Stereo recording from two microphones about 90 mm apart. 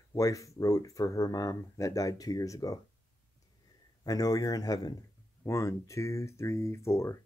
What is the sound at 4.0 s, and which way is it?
Speech, 45° left (ahead or behind).